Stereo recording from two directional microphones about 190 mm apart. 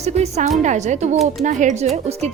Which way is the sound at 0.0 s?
35° right (ahead or behind).